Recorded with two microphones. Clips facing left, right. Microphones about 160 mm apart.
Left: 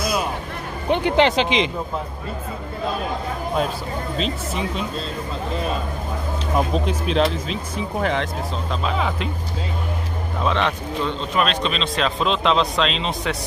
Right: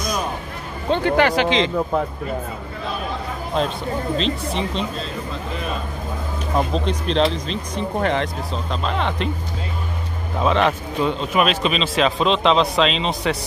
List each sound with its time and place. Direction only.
0.8 s speech: 15° left (ahead or behind)
4.2 s speech: 5° left (ahead or behind)
6.7 s speech: 5° left (ahead or behind)
10.4 s speech: 5° right (ahead or behind)